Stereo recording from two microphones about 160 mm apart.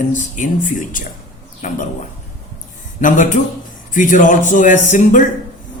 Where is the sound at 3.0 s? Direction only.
55° left (ahead or behind).